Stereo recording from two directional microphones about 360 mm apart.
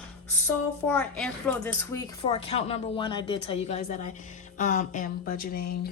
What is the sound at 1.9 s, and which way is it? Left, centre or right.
Speech, centre.